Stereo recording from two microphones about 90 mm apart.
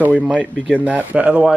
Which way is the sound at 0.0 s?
15° right (ahead or behind).